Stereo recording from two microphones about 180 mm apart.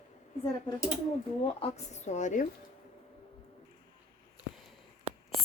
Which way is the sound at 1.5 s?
35° left (ahead or behind).